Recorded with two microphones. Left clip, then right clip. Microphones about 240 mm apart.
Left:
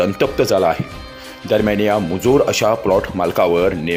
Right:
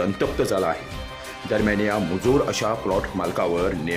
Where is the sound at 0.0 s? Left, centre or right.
Centre.